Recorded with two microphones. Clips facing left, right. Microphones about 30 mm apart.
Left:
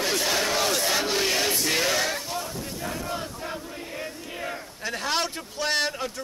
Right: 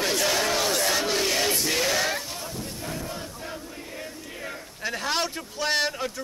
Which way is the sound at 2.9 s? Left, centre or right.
Left.